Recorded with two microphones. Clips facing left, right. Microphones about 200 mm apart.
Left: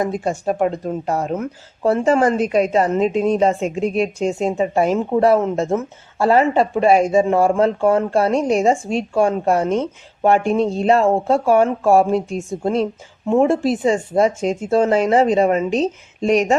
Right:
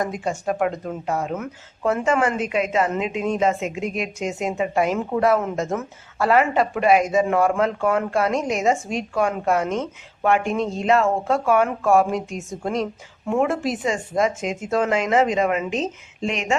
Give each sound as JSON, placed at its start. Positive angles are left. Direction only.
{"t": 0.0, "sound": "speech", "side_deg": 30}